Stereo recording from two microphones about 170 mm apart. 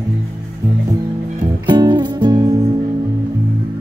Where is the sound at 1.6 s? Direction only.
25° right (ahead or behind).